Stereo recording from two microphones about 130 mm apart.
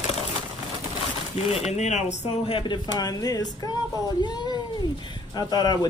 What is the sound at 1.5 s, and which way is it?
Speech, 60° left (ahead or behind).